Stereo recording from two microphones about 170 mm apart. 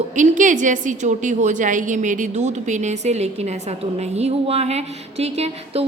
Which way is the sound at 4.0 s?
40° right (ahead or behind).